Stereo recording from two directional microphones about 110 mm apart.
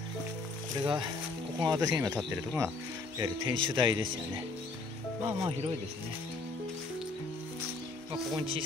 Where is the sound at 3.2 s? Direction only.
40° right (ahead or behind).